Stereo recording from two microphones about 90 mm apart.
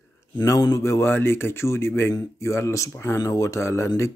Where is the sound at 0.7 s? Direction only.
30° left (ahead or behind).